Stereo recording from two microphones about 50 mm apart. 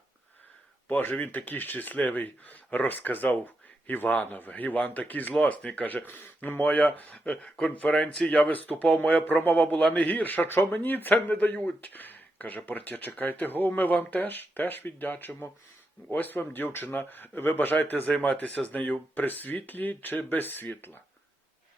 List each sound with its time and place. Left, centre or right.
0.9 s speech: left
7.3 s speech: centre
8.4 s speech: left